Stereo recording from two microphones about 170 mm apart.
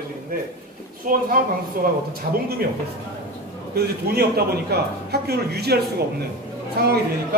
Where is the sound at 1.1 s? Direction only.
55° right (ahead or behind).